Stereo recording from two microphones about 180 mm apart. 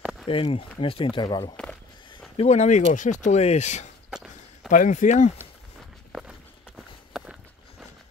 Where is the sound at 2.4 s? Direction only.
40° left (ahead or behind).